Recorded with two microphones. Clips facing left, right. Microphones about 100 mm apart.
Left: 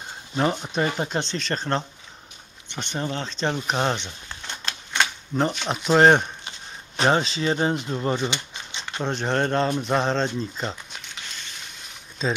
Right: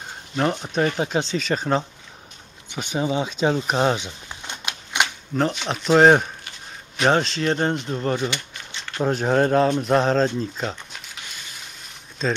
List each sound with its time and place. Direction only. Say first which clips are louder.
0.4 s speech: right 2 dB; centre (ahead or behind)
3.5 s a sound: right 4 dB; 5° right (ahead or behind)
5.3 s speech: right 1 dB; centre (ahead or behind)
8.3 s a sound: even; 20° left (ahead or behind)
9.0 s speech: right 5 dB; 5° right (ahead or behind)
12.2 s speech: right 2 dB; centre (ahead or behind)